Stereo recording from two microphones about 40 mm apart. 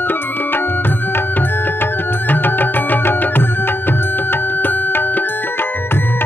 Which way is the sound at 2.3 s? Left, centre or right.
Left.